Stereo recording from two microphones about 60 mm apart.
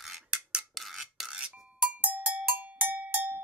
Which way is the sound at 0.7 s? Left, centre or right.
Centre.